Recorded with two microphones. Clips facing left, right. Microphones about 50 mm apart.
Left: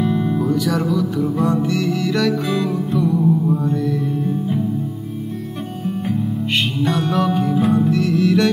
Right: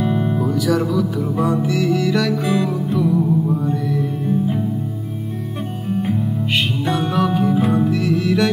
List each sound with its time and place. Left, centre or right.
0.0 s music: centre
0.4 s music: centre
6.5 s music: centre